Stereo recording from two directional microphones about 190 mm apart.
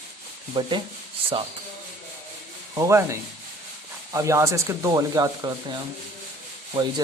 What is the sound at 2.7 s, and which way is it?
Speech, 15° right (ahead or behind).